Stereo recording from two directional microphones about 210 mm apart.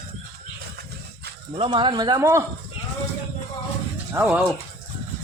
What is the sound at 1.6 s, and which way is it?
Speech, 25° right (ahead or behind).